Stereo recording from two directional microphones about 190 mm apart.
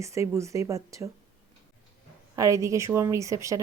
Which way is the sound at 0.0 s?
15° right (ahead or behind).